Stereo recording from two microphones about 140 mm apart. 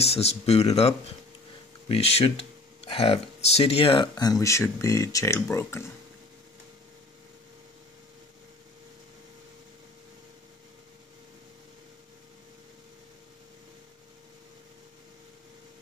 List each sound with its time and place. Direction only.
0.0 s speech: 45° left (ahead or behind)
4.1 s speech: 25° left (ahead or behind)